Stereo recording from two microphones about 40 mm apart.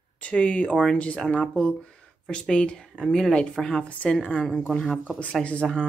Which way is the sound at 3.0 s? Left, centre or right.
Centre.